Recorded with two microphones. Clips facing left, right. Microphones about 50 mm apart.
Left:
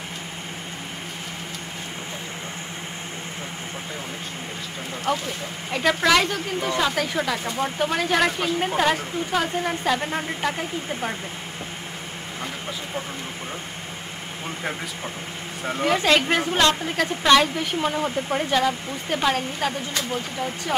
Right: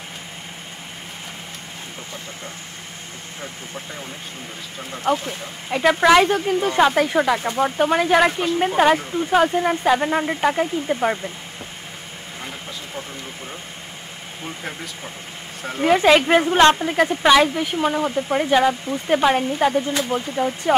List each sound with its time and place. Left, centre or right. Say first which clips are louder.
5.1 s speech: right 4 dB; centre
15.8 s speech: right 5 dB; centre
16.7 s speech: right 5 dB; centre